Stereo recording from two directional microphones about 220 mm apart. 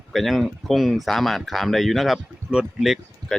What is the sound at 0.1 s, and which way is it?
Speech, centre (ahead or behind).